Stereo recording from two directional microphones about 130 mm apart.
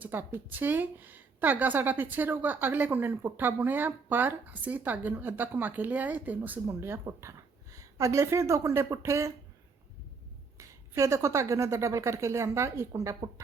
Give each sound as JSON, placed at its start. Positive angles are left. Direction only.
{"t": 0.0, "sound": "a woman's voice", "side_deg": -15}
{"t": 10.6, "sound": "speech", "side_deg": -20}